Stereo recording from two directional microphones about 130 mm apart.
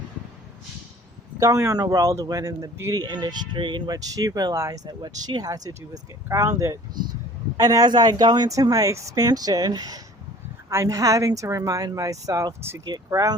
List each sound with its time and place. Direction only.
1.4 s a man's voice: 25° right (ahead or behind)